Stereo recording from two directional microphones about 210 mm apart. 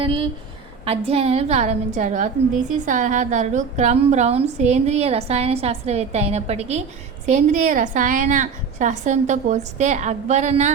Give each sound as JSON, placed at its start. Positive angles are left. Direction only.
{"t": 0.0, "sound": "a woman's voice", "side_deg": -25}